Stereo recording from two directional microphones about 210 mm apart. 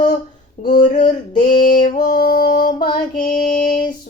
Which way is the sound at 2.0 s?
45° left (ahead or behind).